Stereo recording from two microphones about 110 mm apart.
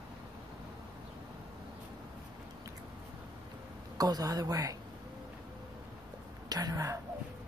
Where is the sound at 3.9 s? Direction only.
35° right (ahead or behind).